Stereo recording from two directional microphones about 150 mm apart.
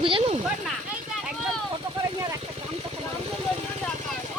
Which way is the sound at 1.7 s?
35° right (ahead or behind).